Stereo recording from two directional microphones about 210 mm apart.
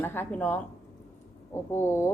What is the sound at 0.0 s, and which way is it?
Speech, 10° left (ahead or behind).